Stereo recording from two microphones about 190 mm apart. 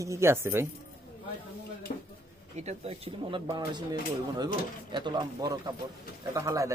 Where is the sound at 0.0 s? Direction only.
15° right (ahead or behind).